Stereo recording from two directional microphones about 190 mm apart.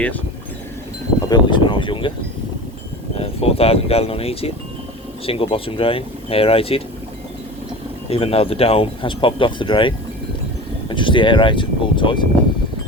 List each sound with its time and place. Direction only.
1.3 s speech: 25° left (ahead or behind)
3.2 s speech: 30° left (ahead or behind)
8.1 s speech: 30° left (ahead or behind)